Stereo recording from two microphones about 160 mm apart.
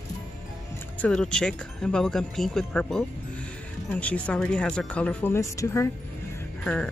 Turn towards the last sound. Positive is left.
turn(degrees=5)  # may be behind; listen again after turning